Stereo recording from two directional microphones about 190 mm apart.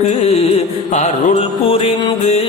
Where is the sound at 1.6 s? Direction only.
30° left (ahead or behind).